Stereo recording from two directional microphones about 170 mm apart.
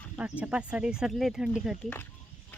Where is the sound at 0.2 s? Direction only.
10° right (ahead or behind).